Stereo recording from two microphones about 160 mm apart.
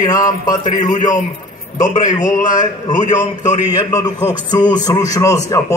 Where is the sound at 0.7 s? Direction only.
50° left (ahead or behind).